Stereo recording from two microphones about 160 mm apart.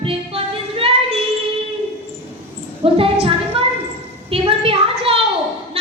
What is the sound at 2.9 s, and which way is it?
Music, 35° right (ahead or behind).